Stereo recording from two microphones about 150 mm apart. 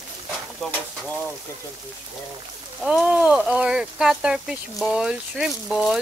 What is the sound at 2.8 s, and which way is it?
Speech, 5° right (ahead or behind).